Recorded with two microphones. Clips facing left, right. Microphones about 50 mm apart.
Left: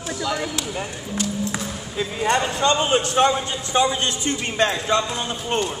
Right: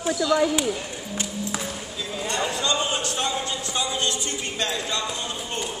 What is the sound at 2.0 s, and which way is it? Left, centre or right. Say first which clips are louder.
Speech: left 7 dB; left.